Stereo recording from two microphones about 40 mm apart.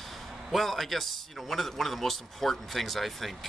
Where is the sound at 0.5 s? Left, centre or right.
Centre.